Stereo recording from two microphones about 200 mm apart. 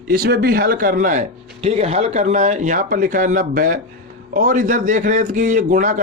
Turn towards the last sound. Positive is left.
turn(degrees=-40)  # may be behind; listen again after turning